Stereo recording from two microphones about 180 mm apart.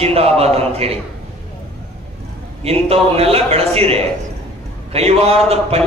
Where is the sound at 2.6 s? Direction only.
35° right (ahead or behind).